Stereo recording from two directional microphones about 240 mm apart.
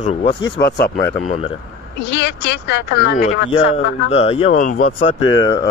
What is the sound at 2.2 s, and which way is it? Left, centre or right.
Speech, left.